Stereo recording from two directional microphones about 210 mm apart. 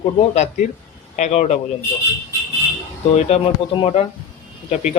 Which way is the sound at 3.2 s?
30° left (ahead or behind).